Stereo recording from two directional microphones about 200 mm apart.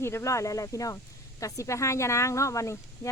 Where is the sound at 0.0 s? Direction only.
15° left (ahead or behind).